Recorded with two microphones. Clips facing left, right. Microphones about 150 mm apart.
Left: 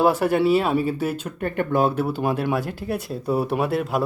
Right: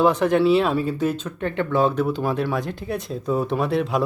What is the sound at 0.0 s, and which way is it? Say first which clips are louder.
Speech: right 1 dB; 5° left (ahead or behind).